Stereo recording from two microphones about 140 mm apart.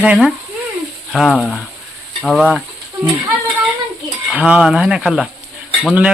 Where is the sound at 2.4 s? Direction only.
10° right (ahead or behind).